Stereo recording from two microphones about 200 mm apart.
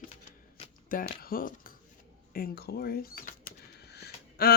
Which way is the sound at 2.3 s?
50° left (ahead or behind).